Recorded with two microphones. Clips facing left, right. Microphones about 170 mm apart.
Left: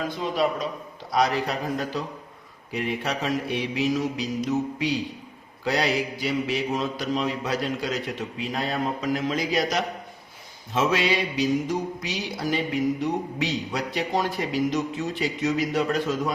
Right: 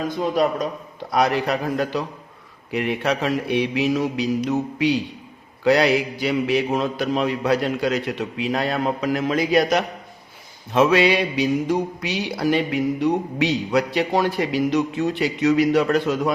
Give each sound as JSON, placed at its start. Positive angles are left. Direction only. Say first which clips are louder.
{"t": 0.2, "sound": "mantra", "louder": "right 5 dB", "side_deg": -50}